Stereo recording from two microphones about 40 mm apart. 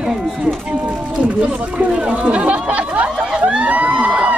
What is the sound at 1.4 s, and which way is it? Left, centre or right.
Chatter, right.